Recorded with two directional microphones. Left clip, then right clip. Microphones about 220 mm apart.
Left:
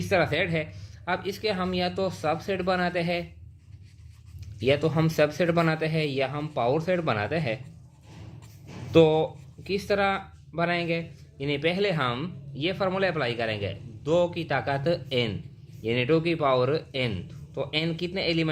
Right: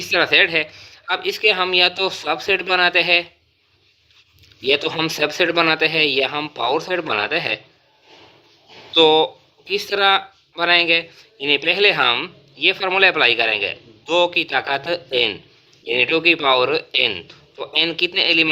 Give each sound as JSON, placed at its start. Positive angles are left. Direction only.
{"t": 0.0, "sound": "speech", "side_deg": -25}
{"t": 4.7, "sound": "speech", "side_deg": -30}
{"t": 8.9, "sound": "speech", "side_deg": -30}